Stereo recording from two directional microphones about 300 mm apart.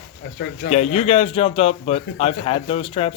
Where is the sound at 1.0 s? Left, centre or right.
Left.